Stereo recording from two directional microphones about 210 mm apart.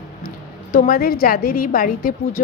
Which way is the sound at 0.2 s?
40° left (ahead or behind).